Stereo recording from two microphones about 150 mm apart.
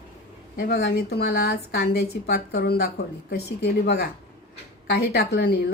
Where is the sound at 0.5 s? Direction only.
90° left.